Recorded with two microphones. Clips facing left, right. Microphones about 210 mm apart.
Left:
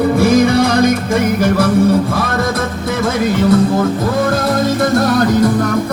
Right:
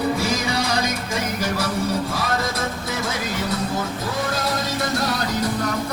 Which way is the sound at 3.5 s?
55° left (ahead or behind).